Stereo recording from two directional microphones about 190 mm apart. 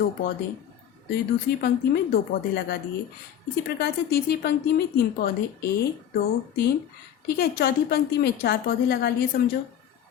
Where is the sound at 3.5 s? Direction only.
60° left (ahead or behind).